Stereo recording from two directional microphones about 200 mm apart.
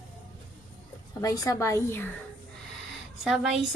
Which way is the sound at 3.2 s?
Centre (ahead or behind).